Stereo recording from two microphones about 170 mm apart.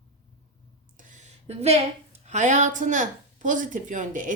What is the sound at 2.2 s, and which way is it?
A woman's voice, 45° right (ahead or behind).